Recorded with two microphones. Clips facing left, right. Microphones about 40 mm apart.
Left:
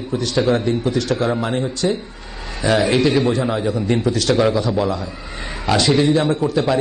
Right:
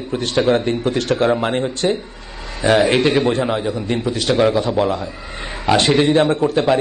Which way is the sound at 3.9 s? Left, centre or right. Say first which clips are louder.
Left 1 dB; right.